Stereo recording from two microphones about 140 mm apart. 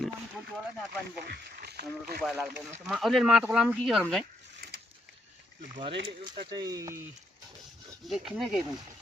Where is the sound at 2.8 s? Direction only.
Centre (ahead or behind).